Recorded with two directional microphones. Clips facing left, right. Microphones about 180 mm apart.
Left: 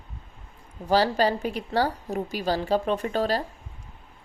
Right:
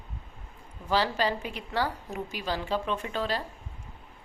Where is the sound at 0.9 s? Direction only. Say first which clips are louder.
Left 5 dB; 40° left (ahead or behind).